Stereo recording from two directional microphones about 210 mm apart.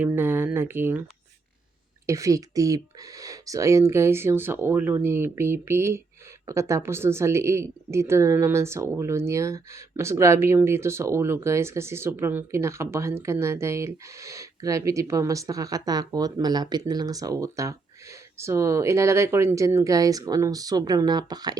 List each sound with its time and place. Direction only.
0.0 s speech: 10° right (ahead or behind)
2.0 s a woman's voice: 15° right (ahead or behind)